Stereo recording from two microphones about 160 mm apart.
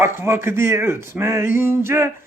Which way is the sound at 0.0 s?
15° right (ahead or behind).